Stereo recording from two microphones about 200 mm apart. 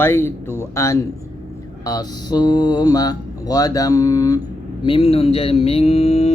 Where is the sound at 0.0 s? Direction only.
10° left (ahead or behind).